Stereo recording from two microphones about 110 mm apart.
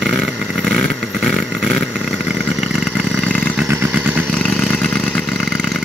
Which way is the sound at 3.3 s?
15° left (ahead or behind).